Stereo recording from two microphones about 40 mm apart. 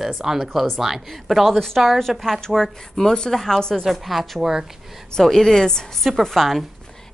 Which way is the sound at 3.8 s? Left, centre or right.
Centre.